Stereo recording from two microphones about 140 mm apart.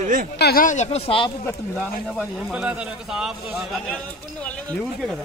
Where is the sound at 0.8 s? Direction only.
40° left (ahead or behind).